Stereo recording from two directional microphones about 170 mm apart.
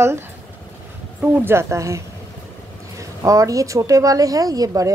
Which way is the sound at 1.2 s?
10° right (ahead or behind).